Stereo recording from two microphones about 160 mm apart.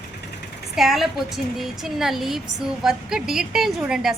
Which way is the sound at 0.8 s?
Centre (ahead or behind).